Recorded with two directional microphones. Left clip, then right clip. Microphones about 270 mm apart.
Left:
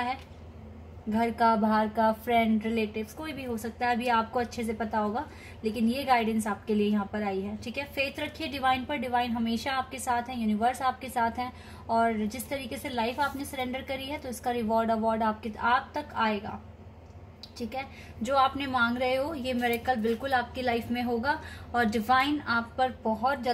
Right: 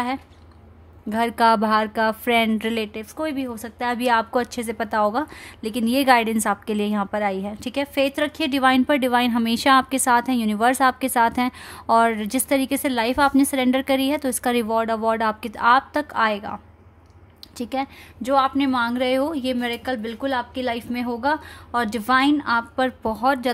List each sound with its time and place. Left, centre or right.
1.1 s a woman's voice: right
17.6 s a woman's voice: right